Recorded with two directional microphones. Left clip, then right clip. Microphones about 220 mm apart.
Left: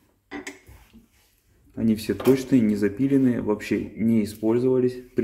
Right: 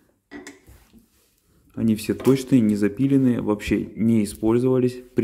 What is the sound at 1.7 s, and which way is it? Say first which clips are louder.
Speech: right 1 dB; 20° right (ahead or behind).